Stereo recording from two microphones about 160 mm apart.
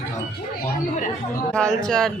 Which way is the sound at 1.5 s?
5° left (ahead or behind).